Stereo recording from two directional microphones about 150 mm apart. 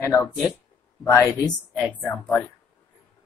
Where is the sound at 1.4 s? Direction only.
10° right (ahead or behind).